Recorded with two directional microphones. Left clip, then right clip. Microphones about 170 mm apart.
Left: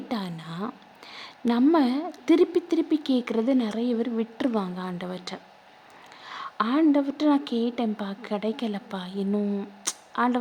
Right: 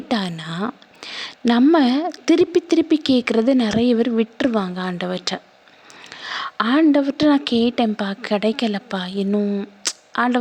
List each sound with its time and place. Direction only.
0.1 s a woman's voice: 25° right (ahead or behind)
6.1 s a sound: 25° right (ahead or behind)
6.9 s a woman's voice: 20° right (ahead or behind)